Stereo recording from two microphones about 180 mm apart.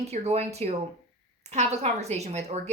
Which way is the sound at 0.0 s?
35° right (ahead or behind).